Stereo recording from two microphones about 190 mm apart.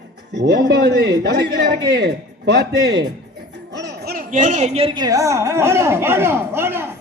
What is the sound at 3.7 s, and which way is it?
Speech, 65° right (ahead or behind).